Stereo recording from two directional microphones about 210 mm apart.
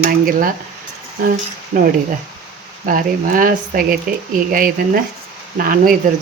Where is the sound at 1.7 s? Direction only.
40° right (ahead or behind).